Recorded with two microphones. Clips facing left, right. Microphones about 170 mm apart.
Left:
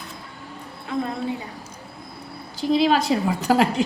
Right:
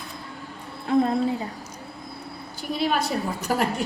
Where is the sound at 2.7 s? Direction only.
90° left.